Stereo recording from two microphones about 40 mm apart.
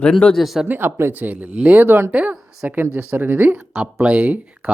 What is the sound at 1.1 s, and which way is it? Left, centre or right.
Speech, right.